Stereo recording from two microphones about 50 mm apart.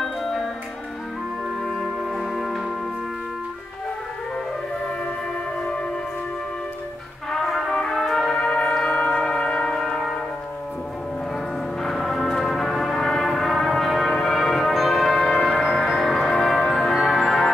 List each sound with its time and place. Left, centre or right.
0.0 s music: centre
1.6 s music: centre
5.6 s music: left
7.2 s music: centre
8.4 s music: centre
11.8 s music: centre